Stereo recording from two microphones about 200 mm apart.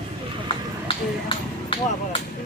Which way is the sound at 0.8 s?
25° left (ahead or behind).